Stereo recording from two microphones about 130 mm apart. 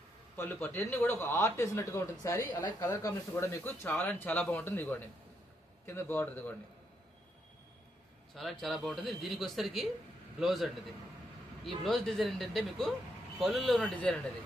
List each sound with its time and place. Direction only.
0.3 s a man's voice: 15° left (ahead or behind)
8.4 s speech: centre (ahead or behind)